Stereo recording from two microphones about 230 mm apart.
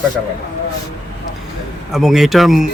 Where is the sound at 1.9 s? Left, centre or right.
Centre.